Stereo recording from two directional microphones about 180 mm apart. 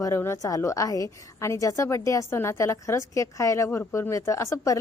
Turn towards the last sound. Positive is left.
turn(degrees=15)  # may be behind; listen again after turning